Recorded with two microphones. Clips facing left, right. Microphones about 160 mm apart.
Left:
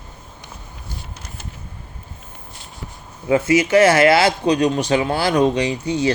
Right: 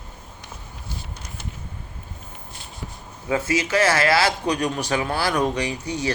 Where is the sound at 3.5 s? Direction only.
20° left (ahead or behind).